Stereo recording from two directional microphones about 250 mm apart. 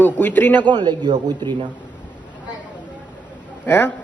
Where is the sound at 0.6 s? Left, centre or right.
Centre.